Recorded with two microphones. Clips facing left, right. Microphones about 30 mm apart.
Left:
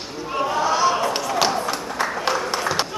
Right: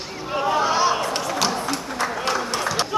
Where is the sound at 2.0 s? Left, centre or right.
Centre.